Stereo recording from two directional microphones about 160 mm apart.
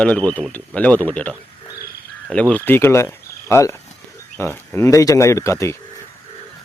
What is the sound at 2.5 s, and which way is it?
Speech, 10° left (ahead or behind).